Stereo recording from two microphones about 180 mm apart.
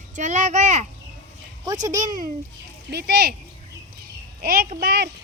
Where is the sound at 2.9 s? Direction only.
65° right (ahead or behind).